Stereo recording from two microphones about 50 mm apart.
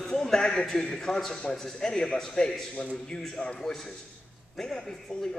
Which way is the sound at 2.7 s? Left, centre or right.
Left.